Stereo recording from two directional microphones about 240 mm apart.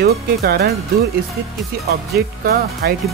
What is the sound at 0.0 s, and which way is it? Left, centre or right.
Speech, right.